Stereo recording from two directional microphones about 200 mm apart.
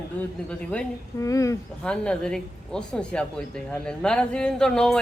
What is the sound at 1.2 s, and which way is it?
Speech, 15° left (ahead or behind).